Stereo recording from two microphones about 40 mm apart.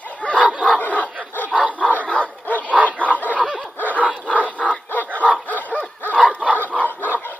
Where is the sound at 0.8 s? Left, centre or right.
Left.